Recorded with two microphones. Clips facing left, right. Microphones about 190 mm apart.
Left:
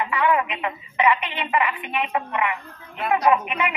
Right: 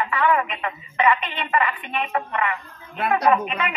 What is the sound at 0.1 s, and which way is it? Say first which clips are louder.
A woman's voice: even; 15° left (ahead or behind).